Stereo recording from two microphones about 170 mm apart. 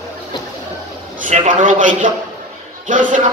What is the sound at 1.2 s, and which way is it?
Speech, 50° right (ahead or behind).